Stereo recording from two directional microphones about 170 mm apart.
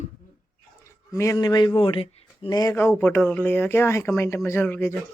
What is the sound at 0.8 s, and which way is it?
Speech, 15° left (ahead or behind).